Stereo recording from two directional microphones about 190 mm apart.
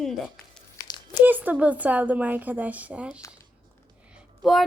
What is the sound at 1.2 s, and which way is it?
Speech, 10° right (ahead or behind).